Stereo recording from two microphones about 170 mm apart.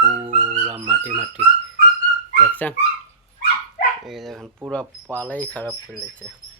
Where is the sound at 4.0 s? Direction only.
Centre (ahead or behind).